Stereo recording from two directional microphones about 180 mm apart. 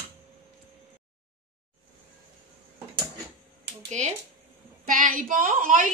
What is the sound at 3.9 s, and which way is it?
A woman's voice, 40° right (ahead or behind).